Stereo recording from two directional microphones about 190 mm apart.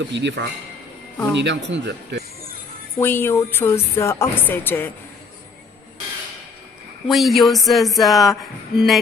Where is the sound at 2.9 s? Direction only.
10° left (ahead or behind).